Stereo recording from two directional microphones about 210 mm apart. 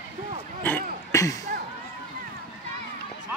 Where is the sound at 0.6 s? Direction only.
10° left (ahead or behind).